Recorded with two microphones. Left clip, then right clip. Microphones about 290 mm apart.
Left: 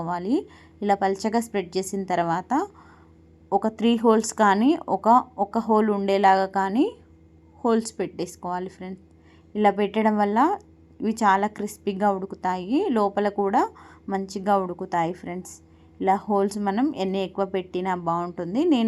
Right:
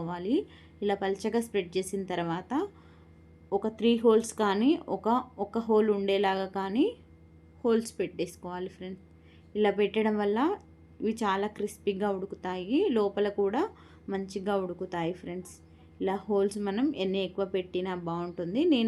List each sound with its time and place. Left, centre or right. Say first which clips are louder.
0.0 s a woman's voice: left 5 dB; centre